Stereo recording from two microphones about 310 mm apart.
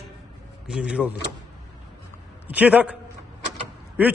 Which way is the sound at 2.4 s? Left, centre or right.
Centre.